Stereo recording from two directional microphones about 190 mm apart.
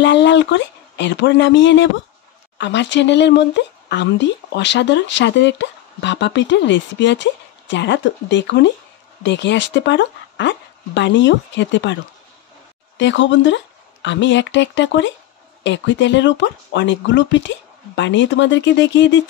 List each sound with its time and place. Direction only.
0.0 s speech: 70° left (ahead or behind)